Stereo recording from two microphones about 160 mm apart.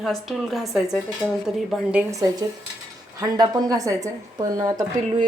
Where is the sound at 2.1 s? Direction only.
20° right (ahead or behind).